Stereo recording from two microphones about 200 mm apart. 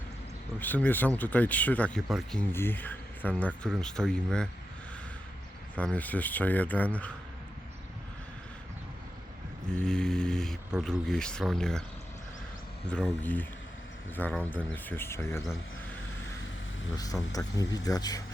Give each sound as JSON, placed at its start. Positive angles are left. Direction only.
{"t": 0.6, "sound": "speech", "side_deg": 10}
{"t": 2.5, "sound": "speech", "side_deg": 10}
{"t": 5.7, "sound": "speech", "side_deg": 5}
{"t": 9.7, "sound": "speech", "side_deg": 5}
{"t": 12.9, "sound": "speech", "side_deg": 5}
{"t": 16.9, "sound": "speech", "side_deg": 20}